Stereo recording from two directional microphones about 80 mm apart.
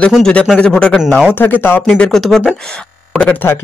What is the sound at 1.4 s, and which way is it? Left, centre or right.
Speech, left.